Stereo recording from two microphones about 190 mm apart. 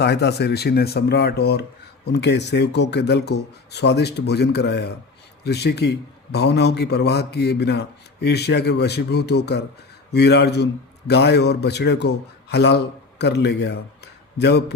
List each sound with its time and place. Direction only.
0.0 s a man's voice: 60° left (ahead or behind)